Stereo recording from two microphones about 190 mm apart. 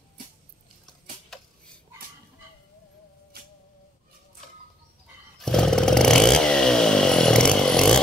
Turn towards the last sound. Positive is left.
turn(degrees=5)  # may be behind; listen again after turning